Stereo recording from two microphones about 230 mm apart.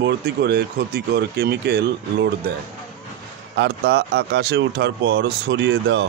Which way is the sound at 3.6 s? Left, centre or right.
Right.